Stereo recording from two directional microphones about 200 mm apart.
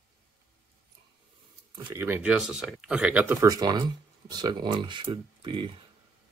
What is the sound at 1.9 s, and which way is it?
Speech, 10° right (ahead or behind).